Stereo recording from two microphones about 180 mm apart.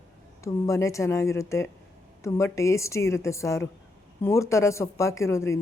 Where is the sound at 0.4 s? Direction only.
15° left (ahead or behind).